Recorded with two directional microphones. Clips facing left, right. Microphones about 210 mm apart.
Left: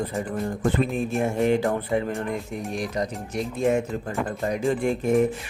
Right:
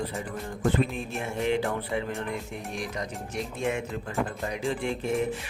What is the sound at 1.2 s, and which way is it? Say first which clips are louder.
Rub: left 5 dB; 45° left (ahead or behind).